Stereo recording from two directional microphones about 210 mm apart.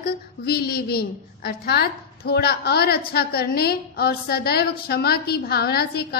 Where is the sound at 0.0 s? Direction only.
45° left (ahead or behind).